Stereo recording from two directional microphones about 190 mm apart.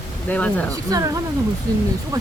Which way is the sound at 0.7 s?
15° right (ahead or behind).